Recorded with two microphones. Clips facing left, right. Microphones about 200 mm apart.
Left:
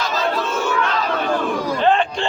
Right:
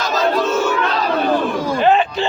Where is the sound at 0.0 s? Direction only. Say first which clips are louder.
Right 4 dB; 45° right (ahead or behind).